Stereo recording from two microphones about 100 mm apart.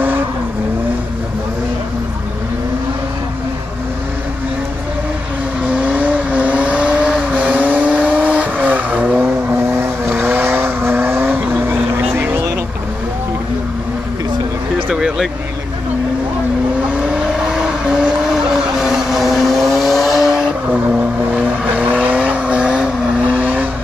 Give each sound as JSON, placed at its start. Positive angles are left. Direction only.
{"t": 5.8, "sound": "vehicle", "side_deg": -15}
{"t": 14.9, "sound": "a sound", "side_deg": -5}
{"t": 17.0, "sound": "vehicle", "side_deg": -5}